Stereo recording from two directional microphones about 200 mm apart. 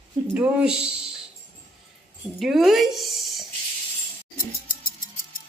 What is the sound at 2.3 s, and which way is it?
Speech, centre (ahead or behind).